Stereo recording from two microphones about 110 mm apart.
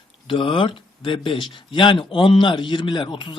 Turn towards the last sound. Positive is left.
turn(degrees=50)  # may be behind; listen again after turning